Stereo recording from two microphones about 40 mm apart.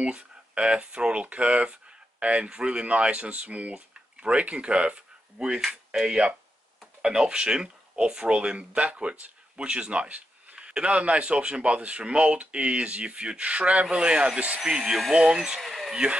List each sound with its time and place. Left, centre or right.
0.6 s a man's voice: right
13.8 s a man's voice: right
14.7 s speech: right
15.0 s speech: centre
15.6 s a sound: centre
15.9 s a man's voice: right